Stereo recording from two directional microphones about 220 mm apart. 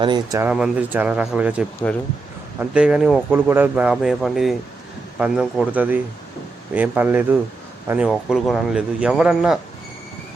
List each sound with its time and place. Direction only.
0.0 s speech: 20° right (ahead or behind); by 9.6 s 5° right (ahead or behind)